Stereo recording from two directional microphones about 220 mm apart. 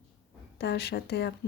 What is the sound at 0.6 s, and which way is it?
Speech, 50° left (ahead or behind).